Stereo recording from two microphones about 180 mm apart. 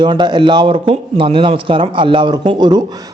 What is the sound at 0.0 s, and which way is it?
A man's voice, 25° right (ahead or behind).